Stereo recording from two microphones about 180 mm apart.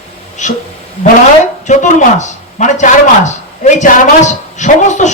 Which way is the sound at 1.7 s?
40° left (ahead or behind).